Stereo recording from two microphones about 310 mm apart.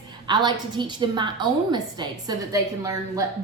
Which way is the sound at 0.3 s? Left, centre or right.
Centre.